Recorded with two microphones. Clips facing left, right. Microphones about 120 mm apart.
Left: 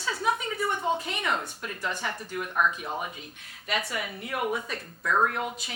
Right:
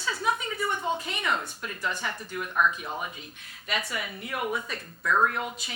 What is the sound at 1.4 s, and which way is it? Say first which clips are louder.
A woman's voice: even; 45° left (ahead or behind).